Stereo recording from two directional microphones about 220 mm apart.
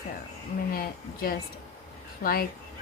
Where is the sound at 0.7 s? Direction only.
40° left (ahead or behind).